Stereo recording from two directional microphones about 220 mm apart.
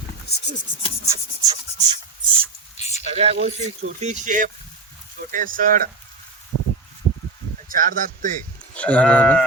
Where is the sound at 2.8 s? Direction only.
30° left (ahead or behind).